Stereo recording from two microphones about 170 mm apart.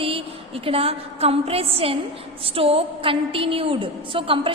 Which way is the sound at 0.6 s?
35° right (ahead or behind).